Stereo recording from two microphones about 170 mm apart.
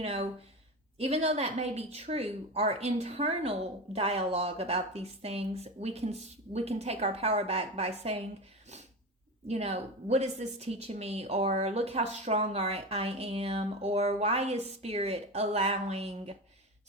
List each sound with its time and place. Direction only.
0.0 s a woman's voice: 40° right (ahead or behind)
9.5 s a woman's voice: 40° right (ahead or behind)